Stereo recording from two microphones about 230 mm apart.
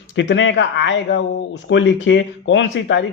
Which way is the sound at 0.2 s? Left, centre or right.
Left.